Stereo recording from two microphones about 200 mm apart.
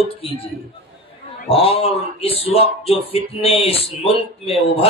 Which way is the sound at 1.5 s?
30° left (ahead or behind).